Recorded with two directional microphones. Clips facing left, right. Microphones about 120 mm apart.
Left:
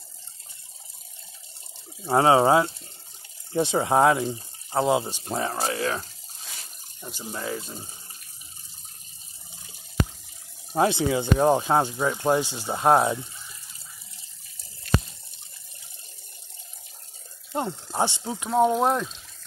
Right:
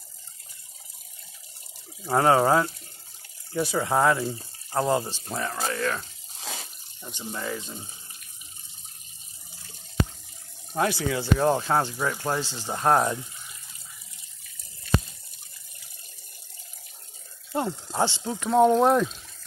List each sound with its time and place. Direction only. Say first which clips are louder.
2.0 s speech: left 2 dB; 15° left (ahead or behind)
4.7 s speech: left 2 dB; 10° left (ahead or behind)
5.0 s speech: left 3 dB; 25° left (ahead or behind)
5.8 s speech: left 1 dB; 5° left (ahead or behind)
10.7 s speech: left 4 dB; 25° left (ahead or behind); by 13.2 s 5° left (ahead or behind)
13.2 s water: left 2 dB; 30° left (ahead or behind)
17.5 s speech: right 1 dB; 15° left (ahead or behind)